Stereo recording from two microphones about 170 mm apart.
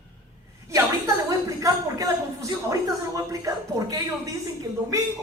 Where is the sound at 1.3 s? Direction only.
20° right (ahead or behind).